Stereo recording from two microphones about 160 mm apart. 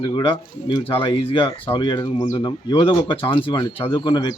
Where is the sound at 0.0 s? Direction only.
30° left (ahead or behind).